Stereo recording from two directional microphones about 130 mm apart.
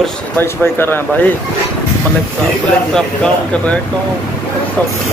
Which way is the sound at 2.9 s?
5° left (ahead or behind).